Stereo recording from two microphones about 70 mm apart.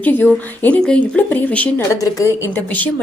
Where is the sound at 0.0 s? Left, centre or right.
Left.